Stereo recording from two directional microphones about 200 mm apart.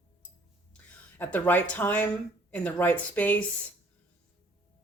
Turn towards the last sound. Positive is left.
turn(degrees=10)  # may be behind; listen again after turning